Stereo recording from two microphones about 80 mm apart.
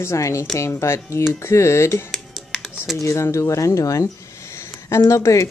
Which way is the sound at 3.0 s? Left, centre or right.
Left.